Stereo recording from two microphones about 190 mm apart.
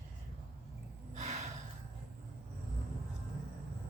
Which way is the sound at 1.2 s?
40° right (ahead or behind).